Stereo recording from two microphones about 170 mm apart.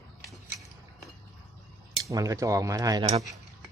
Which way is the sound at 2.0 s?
20° right (ahead or behind).